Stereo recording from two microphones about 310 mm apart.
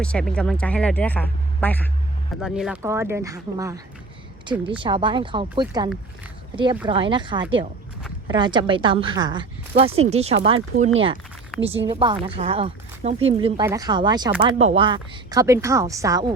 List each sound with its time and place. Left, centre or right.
0.0 s speech: centre
11.5 s speech: centre
11.9 s speech: centre